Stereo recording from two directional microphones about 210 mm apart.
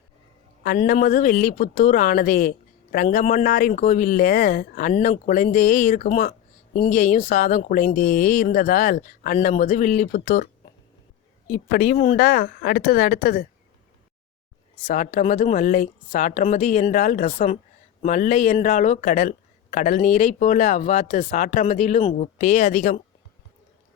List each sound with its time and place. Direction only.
0.8 s speech: 35° left (ahead or behind)
11.5 s speech: 40° left (ahead or behind)
14.8 s speech: 35° left (ahead or behind)